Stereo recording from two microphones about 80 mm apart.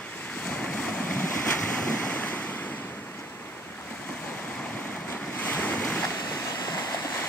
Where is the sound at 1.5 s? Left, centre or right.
Centre.